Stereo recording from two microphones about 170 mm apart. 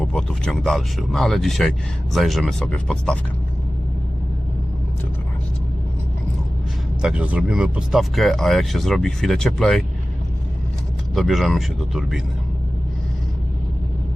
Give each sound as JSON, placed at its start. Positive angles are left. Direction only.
{"t": 0.0, "sound": "speech", "side_deg": 5}
{"t": 7.0, "sound": "speech", "side_deg": -5}
{"t": 11.1, "sound": "speech", "side_deg": 0}